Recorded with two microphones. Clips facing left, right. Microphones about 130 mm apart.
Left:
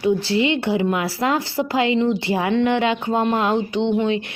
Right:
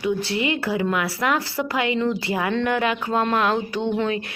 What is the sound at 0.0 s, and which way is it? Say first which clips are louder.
Speech: left 4 dB; 30° left (ahead or behind).